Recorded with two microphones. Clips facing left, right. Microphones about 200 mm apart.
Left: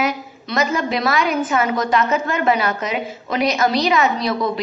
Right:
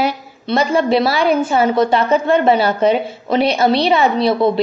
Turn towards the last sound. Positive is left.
turn(degrees=-30)  # may be behind; listen again after turning